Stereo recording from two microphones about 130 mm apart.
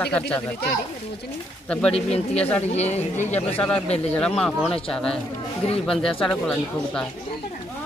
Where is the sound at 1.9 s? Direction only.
50° left (ahead or behind).